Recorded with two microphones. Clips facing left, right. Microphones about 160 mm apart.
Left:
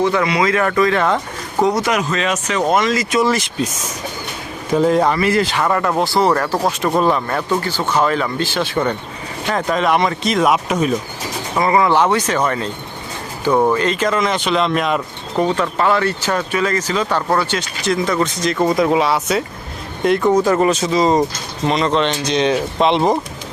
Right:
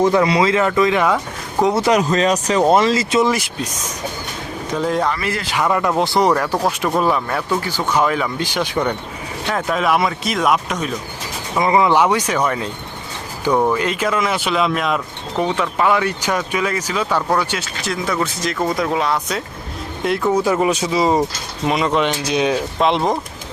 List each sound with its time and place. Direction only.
0.0 s speech: 35° right (ahead or behind); by 1.6 s 5° right (ahead or behind)
1.6 s speech: 30° right (ahead or behind)
3.2 s speech: 10° right (ahead or behind)
4.8 s speech: 5° left (ahead or behind); by 6.3 s 20° right (ahead or behind)
6.5 s speech: 10° left (ahead or behind)
7.0 s speech: 5° right (ahead or behind)
9.5 s speech: centre (ahead or behind)
11.6 s speech: 15° right (ahead or behind)
13.5 s speech: 5° left (ahead or behind)
13.7 s speech: 10° right (ahead or behind)